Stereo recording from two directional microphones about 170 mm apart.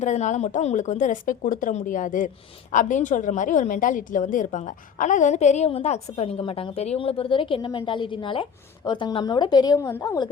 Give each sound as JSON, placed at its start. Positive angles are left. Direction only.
{"t": 0.0, "sound": "a woman's voice", "side_deg": 45}